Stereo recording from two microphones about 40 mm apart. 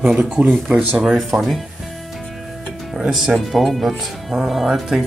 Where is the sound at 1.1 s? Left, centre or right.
Centre.